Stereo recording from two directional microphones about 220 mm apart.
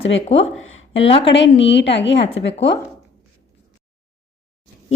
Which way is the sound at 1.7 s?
55° left (ahead or behind).